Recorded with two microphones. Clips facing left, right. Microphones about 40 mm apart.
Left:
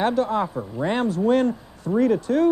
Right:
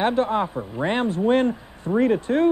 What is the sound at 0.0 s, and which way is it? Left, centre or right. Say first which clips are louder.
Speech: even; right.